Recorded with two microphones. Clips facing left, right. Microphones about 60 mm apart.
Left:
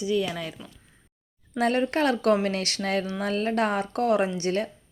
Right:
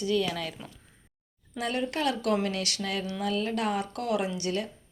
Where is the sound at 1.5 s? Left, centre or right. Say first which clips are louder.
Left 7 dB; left.